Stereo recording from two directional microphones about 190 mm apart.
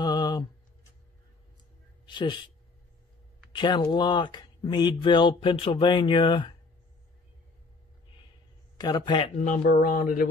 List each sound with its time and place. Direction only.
0.0 s a sound: 20° left (ahead or behind)
2.0 s a woman's voice: 25° left (ahead or behind)
3.5 s speech: 25° left (ahead or behind)
8.7 s speech: 20° left (ahead or behind)
9.6 s speech: 50° left (ahead or behind)